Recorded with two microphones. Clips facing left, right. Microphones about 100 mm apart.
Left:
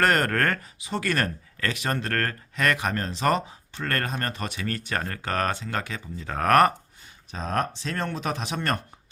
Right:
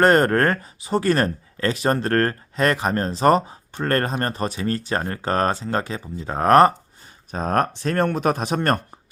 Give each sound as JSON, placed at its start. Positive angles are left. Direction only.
{"t": 0.0, "sound": "speech", "side_deg": -30}
{"t": 7.3, "sound": "speech", "side_deg": -50}